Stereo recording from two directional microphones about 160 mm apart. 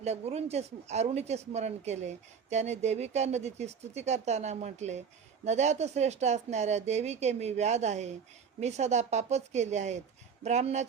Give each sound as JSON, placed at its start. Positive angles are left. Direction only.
{"t": 0.0, "sound": "speech", "side_deg": -40}